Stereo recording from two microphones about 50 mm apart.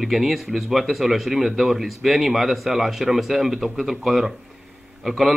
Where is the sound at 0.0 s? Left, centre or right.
Centre.